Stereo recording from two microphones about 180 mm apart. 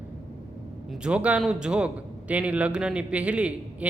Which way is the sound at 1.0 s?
5° right (ahead or behind).